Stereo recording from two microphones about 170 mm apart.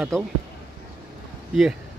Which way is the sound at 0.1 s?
5° left (ahead or behind).